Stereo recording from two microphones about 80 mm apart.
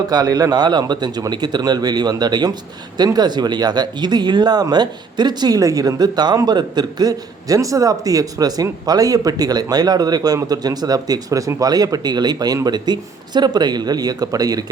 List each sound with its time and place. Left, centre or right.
0.1 s a man's voice: right